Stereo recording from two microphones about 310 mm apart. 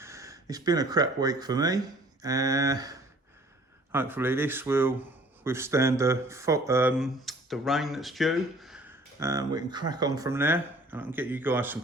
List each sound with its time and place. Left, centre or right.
0.0 s speech: centre